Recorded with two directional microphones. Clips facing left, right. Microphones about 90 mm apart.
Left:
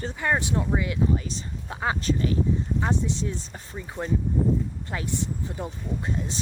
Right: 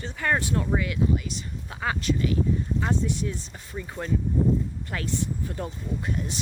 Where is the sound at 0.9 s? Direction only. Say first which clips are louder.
Even; 35° left (ahead or behind).